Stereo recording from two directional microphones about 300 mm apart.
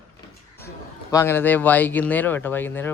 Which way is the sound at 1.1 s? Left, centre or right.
Centre.